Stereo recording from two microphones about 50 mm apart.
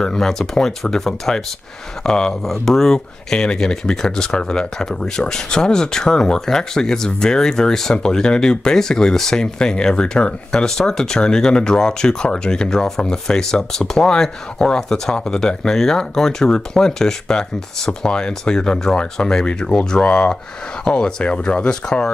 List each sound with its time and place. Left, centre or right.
0.0 s speech: centre